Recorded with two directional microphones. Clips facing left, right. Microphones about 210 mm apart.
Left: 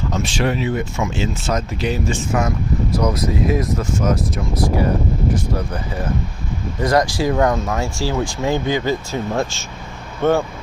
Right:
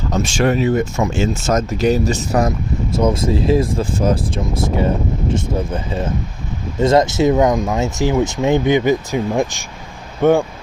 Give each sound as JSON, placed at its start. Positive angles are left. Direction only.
{"t": 0.1, "sound": "speech", "side_deg": -45}
{"t": 2.9, "sound": "speech", "side_deg": -25}